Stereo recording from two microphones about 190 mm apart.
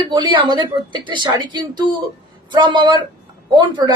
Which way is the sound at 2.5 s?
25° right (ahead or behind).